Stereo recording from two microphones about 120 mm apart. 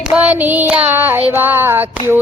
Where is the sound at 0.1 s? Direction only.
10° right (ahead or behind).